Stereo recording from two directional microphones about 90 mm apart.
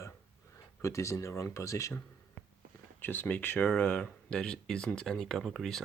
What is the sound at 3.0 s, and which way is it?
Speech, 20° left (ahead or behind).